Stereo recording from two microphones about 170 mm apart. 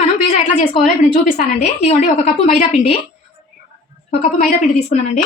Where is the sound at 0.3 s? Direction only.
45° left (ahead or behind).